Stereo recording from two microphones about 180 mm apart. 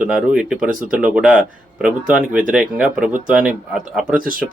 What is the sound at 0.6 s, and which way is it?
Speech, 50° right (ahead or behind).